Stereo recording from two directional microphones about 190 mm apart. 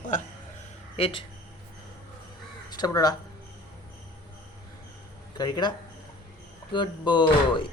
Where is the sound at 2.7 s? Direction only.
20° left (ahead or behind).